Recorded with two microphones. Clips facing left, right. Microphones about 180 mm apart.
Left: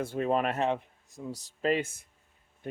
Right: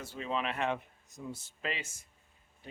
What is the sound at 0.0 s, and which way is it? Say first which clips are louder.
Speech: left 8 dB; 50° left (ahead or behind).